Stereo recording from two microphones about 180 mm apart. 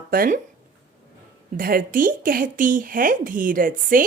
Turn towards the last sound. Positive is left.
turn(degrees=-50)  # may be behind; listen again after turning